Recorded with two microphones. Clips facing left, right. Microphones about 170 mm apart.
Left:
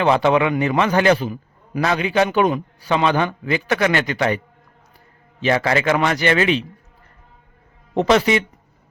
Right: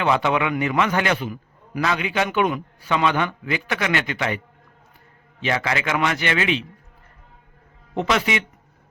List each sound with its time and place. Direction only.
0.0 s a man's voice: 35° left (ahead or behind)
5.4 s a man's voice: 40° left (ahead or behind)
7.9 s a man's voice: 35° left (ahead or behind)